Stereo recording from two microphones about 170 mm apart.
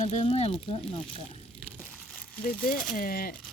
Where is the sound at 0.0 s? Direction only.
40° left (ahead or behind).